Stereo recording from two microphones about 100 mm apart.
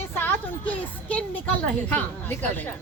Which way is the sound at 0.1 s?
20° left (ahead or behind).